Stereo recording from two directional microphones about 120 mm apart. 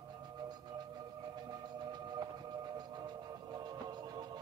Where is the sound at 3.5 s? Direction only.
35° right (ahead or behind).